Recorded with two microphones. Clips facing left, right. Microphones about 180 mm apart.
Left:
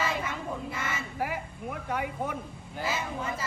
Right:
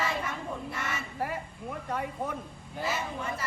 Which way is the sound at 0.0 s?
Centre (ahead or behind).